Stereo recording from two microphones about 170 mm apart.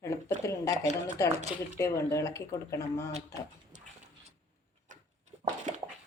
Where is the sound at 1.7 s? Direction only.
20° left (ahead or behind).